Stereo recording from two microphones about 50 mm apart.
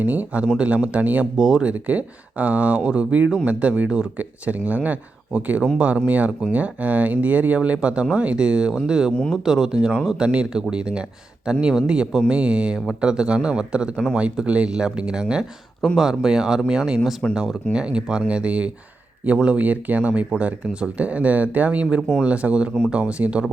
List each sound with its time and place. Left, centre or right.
0.0 s speech: right
1.4 s speech: centre
1.6 s speech: right
17.0 s speech: centre; by 23.5 s right